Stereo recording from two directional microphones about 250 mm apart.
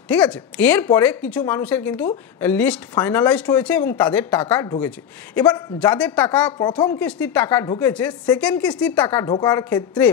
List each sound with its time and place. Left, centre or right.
0.1 s a woman's voice: centre